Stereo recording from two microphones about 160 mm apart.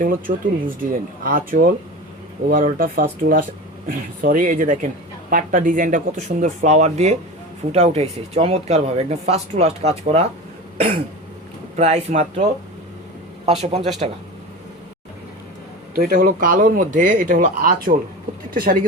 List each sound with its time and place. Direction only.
0.0 s speech: 60° right (ahead or behind); by 9.9 s 40° right (ahead or behind)
10.8 s cough: 40° right (ahead or behind)
11.8 s speech: 45° right (ahead or behind)
16.0 s speech: 65° right (ahead or behind)